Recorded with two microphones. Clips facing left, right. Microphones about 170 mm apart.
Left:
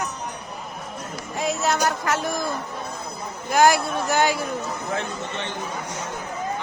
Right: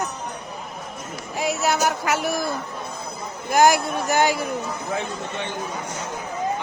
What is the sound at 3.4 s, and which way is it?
A man's voice, 15° right (ahead or behind).